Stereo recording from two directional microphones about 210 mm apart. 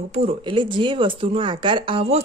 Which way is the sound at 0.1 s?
30° right (ahead or behind).